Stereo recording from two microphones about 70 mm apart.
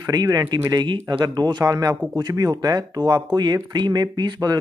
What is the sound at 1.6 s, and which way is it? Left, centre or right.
Speech, right.